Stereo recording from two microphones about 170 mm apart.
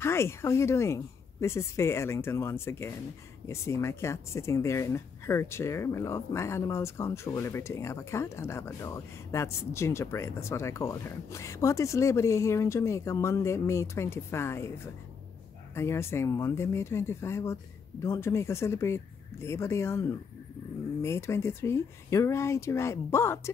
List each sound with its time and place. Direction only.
0.0 s speech: 15° left (ahead or behind)
15.7 s speech: 15° left (ahead or behind)